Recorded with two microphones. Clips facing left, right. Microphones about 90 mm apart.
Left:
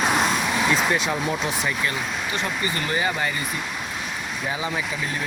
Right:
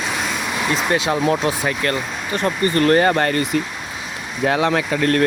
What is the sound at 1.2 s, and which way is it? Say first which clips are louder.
Speech: right 6 dB; 65° right (ahead or behind).